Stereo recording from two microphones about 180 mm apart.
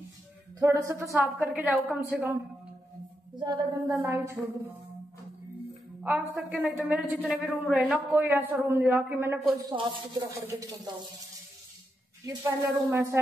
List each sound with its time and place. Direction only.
0.6 s a man's voice: 15° right (ahead or behind)
6.0 s a man's voice: 10° right (ahead or behind)
9.7 s speech: 25° right (ahead or behind)
12.4 s a man's voice: 15° right (ahead or behind)